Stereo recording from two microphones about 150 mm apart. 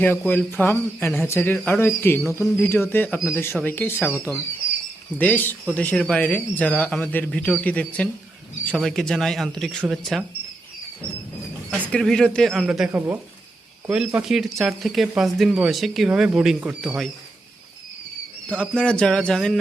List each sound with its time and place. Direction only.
0.3 s speech: 15° left (ahead or behind)
4.1 s speech: 15° right (ahead or behind)
5.1 s speech: 10° left (ahead or behind)
11.7 s speech: 5° left (ahead or behind)
18.4 s speech: 5° left (ahead or behind)